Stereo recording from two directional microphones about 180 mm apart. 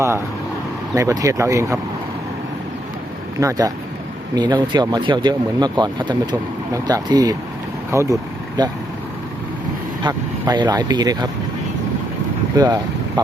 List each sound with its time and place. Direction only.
0.9 s speech: 20° right (ahead or behind)
3.4 s speech: 15° right (ahead or behind)
10.0 s speech: 25° right (ahead or behind)
12.5 s speech: 20° right (ahead or behind)